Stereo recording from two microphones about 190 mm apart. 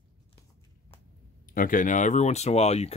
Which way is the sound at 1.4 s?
45° left (ahead or behind).